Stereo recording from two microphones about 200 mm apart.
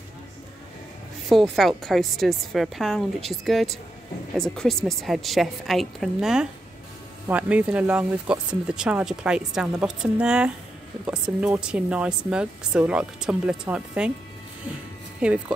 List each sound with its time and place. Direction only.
1.3 s speech: centre (ahead or behind)
15.2 s speech: 5° right (ahead or behind)